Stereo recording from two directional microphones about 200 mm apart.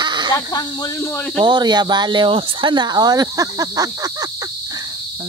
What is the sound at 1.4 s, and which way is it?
Speech, 20° right (ahead or behind).